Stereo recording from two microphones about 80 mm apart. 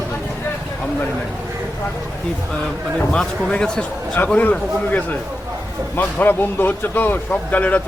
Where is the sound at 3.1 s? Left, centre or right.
Centre.